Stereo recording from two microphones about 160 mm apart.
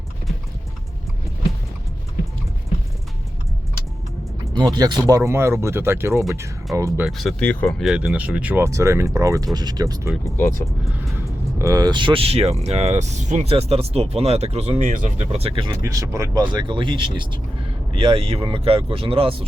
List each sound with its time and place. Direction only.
4.5 s speech: 25° right (ahead or behind)
7.0 s speech: centre (ahead or behind)
7.8 s speech: 5° right (ahead or behind); by 10.1 s 20° right (ahead or behind)
10.2 s speech: 15° left (ahead or behind)
11.6 s speech: 25° right (ahead or behind)